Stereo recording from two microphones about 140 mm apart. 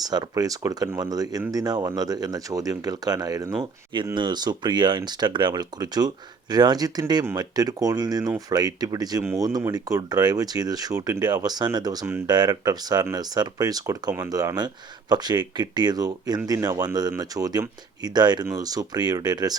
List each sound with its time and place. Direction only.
0.1 s speech: 30° right (ahead or behind)